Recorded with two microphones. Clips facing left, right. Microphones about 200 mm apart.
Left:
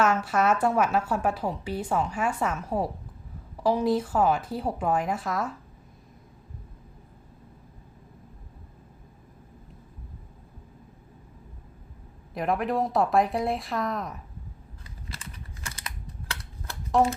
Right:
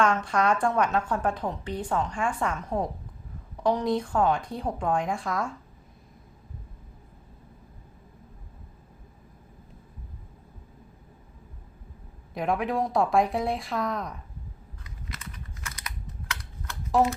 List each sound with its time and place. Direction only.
0.0 s a woman's voice: 5° left (ahead or behind)
12.3 s a woman's voice: centre (ahead or behind)
15.1 s typing: 30° left (ahead or behind)
16.3 s a sound: 30° left (ahead or behind)